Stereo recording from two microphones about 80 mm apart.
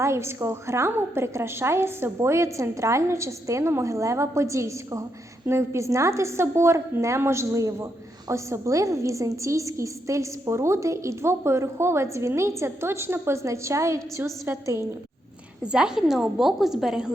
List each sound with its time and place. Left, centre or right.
0.0 s a woman's voice: right
15.6 s a woman's voice: centre